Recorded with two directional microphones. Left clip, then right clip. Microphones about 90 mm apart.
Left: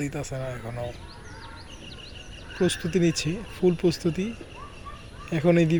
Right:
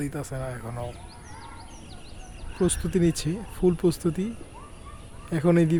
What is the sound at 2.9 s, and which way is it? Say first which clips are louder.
Speech: even; 40° right (ahead or behind).